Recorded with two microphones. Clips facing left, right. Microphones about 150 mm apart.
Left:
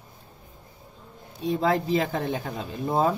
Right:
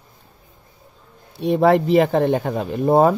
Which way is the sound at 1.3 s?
75° right (ahead or behind).